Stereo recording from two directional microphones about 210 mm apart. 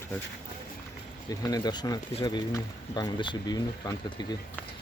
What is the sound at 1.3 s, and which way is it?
Speech, 15° left (ahead or behind).